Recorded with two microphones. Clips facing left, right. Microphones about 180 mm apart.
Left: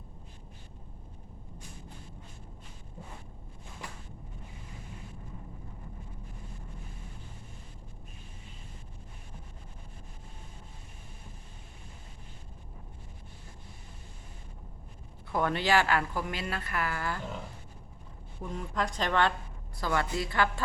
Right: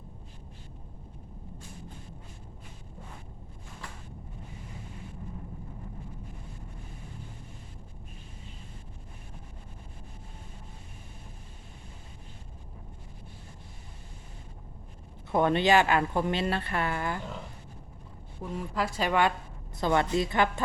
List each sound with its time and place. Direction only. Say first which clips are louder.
15.3 s a woman's voice: right 4 dB; 20° right (ahead or behind)
18.4 s a woman's voice: right 2 dB; 5° right (ahead or behind)
19.7 s a woman's voice: right 5 dB; 20° right (ahead or behind)